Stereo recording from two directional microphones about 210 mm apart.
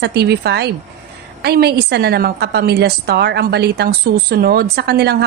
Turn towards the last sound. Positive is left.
turn(degrees=-50)  # may be behind; listen again after turning